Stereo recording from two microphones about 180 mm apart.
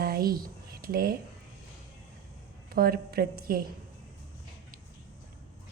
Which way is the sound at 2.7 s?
55° right (ahead or behind).